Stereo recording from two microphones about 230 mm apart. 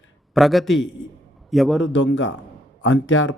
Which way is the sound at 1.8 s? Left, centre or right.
Left.